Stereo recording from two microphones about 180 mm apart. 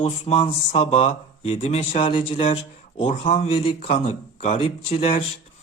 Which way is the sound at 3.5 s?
30° left (ahead or behind).